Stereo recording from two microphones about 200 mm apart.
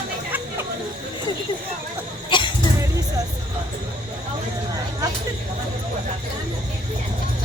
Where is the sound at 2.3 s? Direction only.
25° left (ahead or behind).